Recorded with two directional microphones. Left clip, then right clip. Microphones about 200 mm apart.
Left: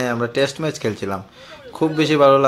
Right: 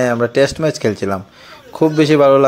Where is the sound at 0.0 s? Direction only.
25° right (ahead or behind).